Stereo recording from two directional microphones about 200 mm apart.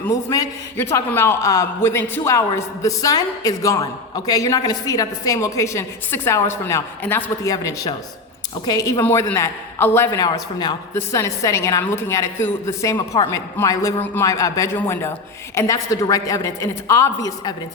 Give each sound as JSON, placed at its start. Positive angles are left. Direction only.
{"t": 0.0, "sound": "a man's voice", "side_deg": 15}